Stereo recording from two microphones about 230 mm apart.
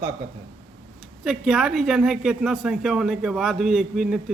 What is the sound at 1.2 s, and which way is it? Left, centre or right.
Speech, centre.